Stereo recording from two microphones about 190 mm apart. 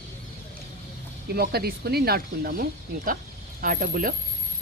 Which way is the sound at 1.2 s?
55° right (ahead or behind).